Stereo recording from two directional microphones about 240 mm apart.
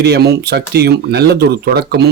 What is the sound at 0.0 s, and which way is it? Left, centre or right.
Speech, right.